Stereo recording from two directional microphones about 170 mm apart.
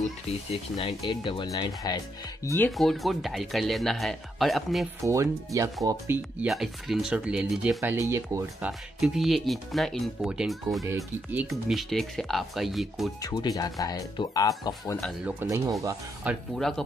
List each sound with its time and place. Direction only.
0.7 s speech: 30° left (ahead or behind)
2.8 s speech: centre (ahead or behind)
5.0 s speech: 20° right (ahead or behind)
6.4 s speech: centre (ahead or behind)
13.2 s speech: 25° left (ahead or behind)
15.4 s speech: 20° right (ahead or behind)
16.5 s speech: centre (ahead or behind)